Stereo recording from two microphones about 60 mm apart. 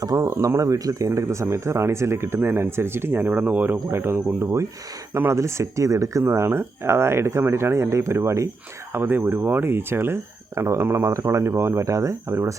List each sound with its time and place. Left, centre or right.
0.2 s speech: right
3.9 s speech: right
6.2 s speech: right
8.9 s speech: right